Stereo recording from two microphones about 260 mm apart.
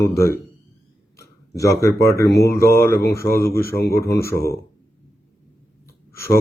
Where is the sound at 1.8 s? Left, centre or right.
Centre.